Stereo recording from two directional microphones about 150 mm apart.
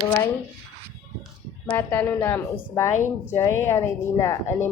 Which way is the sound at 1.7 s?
10° left (ahead or behind).